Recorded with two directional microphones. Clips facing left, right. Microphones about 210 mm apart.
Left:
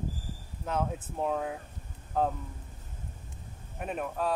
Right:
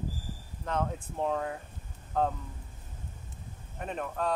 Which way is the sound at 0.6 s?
5° left (ahead or behind).